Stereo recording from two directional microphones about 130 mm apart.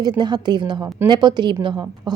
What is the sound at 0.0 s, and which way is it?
A woman's voice, 35° right (ahead or behind).